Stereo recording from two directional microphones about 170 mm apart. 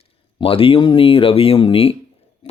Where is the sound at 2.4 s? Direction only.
30° left (ahead or behind).